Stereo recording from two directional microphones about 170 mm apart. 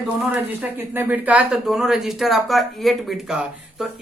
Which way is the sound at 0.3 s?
10° right (ahead or behind).